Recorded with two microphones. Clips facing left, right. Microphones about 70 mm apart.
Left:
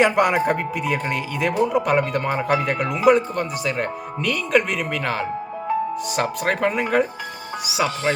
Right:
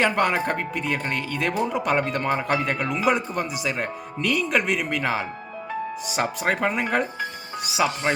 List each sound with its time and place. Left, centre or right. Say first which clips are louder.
0.0 s speech: left 4 dB; centre
8.1 s speech: left 4 dB; right